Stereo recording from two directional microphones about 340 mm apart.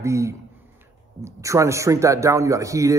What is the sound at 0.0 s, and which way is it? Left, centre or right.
A man's voice, centre.